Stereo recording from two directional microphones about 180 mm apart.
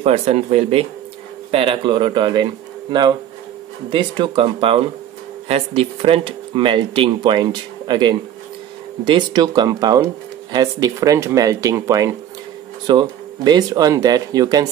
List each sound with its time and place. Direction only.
0.0 s speech: 35° right (ahead or behind)